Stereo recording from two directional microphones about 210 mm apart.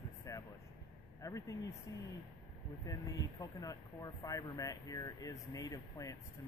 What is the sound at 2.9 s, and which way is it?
Speech, 15° left (ahead or behind).